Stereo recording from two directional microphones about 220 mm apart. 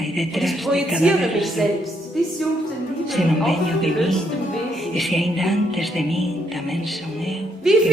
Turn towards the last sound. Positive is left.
turn(degrees=0)  # may be behind; listen again after turning